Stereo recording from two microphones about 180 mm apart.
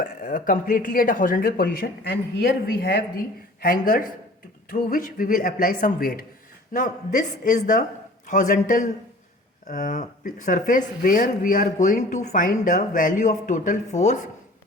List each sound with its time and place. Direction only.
0.0 s speech: 45° left (ahead or behind)